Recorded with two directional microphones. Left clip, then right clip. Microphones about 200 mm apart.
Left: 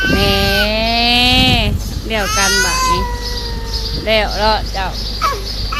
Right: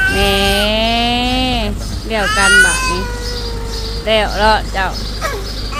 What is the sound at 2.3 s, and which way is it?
Speech, centre (ahead or behind).